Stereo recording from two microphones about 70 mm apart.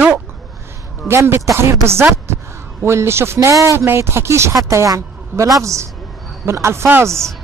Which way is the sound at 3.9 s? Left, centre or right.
Right.